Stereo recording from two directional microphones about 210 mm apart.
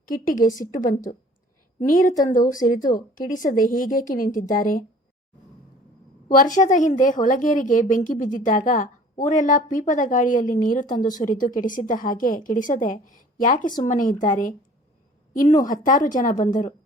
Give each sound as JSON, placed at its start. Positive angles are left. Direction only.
{"t": 0.1, "sound": "a woman's voice", "side_deg": 40}
{"t": 6.3, "sound": "a woman's voice", "side_deg": 40}
{"t": 15.6, "sound": "a woman's voice", "side_deg": 40}